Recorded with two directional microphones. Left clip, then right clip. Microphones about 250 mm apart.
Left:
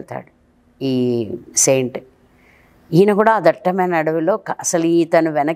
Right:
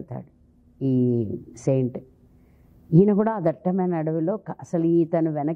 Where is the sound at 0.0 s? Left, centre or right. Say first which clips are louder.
Left 9 dB; centre.